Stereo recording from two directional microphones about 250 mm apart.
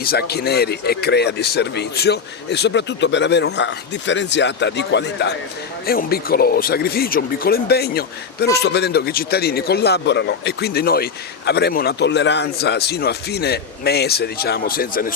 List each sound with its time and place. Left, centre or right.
0.0 s speech: left